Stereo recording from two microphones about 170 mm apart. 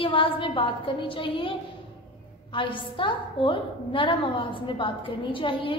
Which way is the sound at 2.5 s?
30° left (ahead or behind).